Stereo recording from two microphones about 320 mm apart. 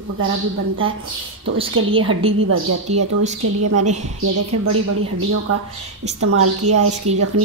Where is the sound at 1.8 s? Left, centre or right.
Right.